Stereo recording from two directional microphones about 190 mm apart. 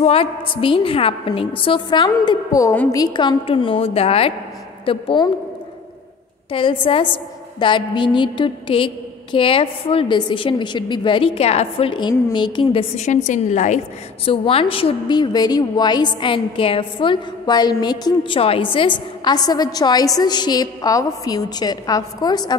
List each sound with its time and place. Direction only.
0.0 s a woman's voice: 30° left (ahead or behind); by 3.0 s 15° left (ahead or behind)
3.0 s a woman's voice: 25° left (ahead or behind)
6.5 s a woman's voice: 25° left (ahead or behind)
12.9 s a woman's voice: 40° left (ahead or behind)
14.2 s a woman's voice: 30° left (ahead or behind)